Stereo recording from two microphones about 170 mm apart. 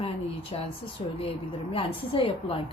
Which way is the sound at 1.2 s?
35° left (ahead or behind).